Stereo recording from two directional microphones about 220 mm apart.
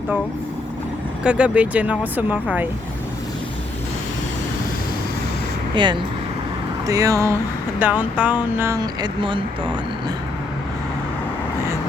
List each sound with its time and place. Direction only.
1.2 s speech: 5° right (ahead or behind)
5.7 s speech: 20° right (ahead or behind)